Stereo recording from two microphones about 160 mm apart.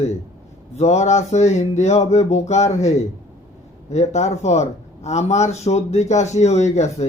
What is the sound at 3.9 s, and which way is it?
A man's voice, 45° left (ahead or behind).